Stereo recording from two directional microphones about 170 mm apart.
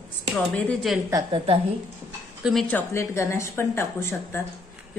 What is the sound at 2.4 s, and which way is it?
Speech, centre (ahead or behind).